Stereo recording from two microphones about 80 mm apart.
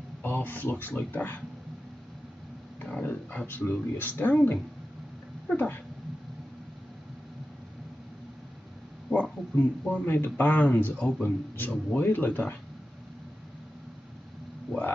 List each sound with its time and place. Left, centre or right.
0.2 s speech: left
2.8 s a sound: centre
3.7 s speech: centre
9.1 s speech: centre
11.2 s speech: left
14.7 s a sound: centre